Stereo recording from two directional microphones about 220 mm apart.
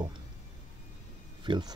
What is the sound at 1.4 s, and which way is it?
Speech, 20° right (ahead or behind).